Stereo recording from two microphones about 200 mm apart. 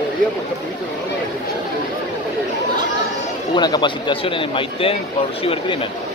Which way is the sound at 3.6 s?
20° left (ahead or behind).